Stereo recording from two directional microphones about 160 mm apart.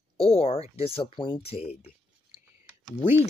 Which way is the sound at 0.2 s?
35° left (ahead or behind).